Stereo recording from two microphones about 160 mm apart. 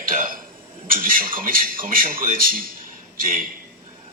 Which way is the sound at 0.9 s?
60° right (ahead or behind).